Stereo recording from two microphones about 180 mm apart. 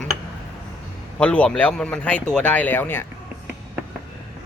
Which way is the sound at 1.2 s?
5° left (ahead or behind).